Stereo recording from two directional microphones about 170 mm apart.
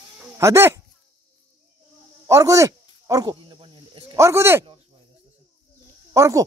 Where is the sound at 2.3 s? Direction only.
20° right (ahead or behind).